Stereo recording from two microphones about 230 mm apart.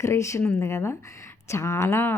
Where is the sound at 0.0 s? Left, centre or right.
Centre.